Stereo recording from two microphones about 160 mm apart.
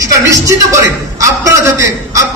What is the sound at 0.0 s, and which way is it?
A man's voice, 20° right (ahead or behind).